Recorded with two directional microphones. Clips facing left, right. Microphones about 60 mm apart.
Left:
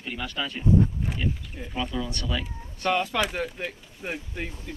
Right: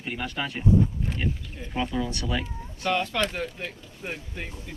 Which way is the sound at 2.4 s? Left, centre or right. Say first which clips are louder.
Left 1 dB; centre.